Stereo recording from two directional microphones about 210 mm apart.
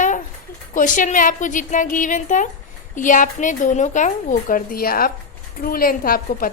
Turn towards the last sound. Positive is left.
turn(degrees=45)  # may be behind; listen again after turning